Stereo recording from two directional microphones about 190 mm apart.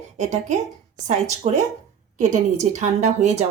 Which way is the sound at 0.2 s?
35° right (ahead or behind).